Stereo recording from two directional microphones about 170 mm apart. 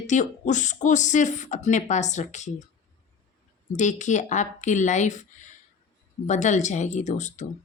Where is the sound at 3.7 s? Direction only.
45° left (ahead or behind).